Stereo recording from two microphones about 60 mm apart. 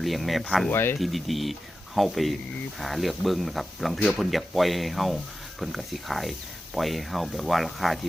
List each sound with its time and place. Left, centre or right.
0.0 s speech: centre
0.7 s speech: left
0.9 s speech: centre